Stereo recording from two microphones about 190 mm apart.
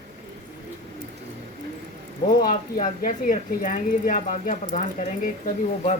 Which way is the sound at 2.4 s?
45° left (ahead or behind).